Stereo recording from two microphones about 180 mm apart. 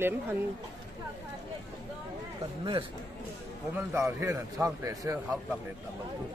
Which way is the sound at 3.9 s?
15° right (ahead or behind).